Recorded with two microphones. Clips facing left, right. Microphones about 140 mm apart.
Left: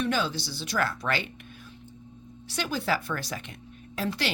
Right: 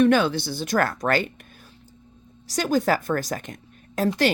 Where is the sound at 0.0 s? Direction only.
60° right (ahead or behind).